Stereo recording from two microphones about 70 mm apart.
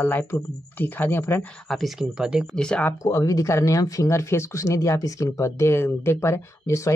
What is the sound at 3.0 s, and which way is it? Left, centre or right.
Speech, left.